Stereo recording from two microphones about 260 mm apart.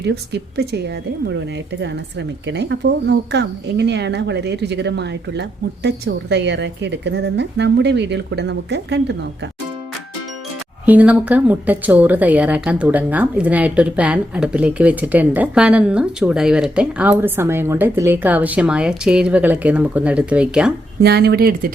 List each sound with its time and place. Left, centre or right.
0.0 s speech: right
2.5 s speech: right
10.8 s speech: centre
21.0 s speech: right